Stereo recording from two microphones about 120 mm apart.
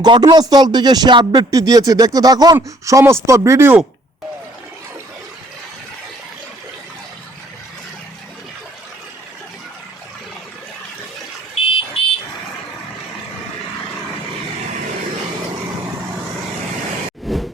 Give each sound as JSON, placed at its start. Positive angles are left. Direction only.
{"t": 0.0, "sound": "speech", "side_deg": -35}
{"t": 11.6, "sound": "vehicle", "side_deg": 55}
{"t": 17.3, "sound": "a sound", "side_deg": 0}